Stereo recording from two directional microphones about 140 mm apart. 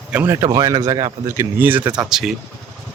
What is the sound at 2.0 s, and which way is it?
Speech, 5° right (ahead or behind).